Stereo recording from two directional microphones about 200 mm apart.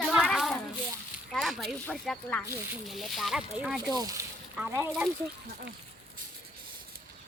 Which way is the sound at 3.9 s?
20° right (ahead or behind).